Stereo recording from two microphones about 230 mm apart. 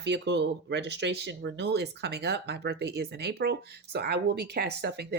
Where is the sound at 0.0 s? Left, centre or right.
Right.